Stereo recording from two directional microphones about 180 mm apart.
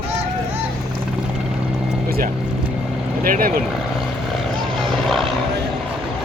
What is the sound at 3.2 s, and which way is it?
Speech, 50° right (ahead or behind).